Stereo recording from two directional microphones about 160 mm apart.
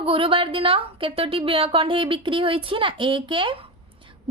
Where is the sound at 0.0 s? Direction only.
35° right (ahead or behind).